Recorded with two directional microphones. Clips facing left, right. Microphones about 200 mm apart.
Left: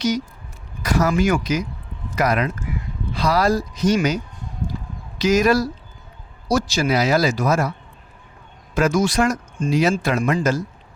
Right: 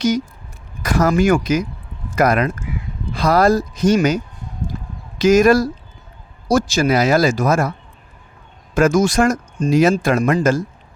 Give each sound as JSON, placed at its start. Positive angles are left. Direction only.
{"t": 0.8, "sound": "speech", "side_deg": -50}
{"t": 8.7, "sound": "speech", "side_deg": -45}